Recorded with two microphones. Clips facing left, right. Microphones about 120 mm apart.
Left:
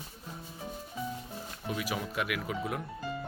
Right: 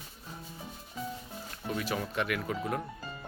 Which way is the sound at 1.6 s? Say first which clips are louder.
Right 1 dB; 10° left (ahead or behind).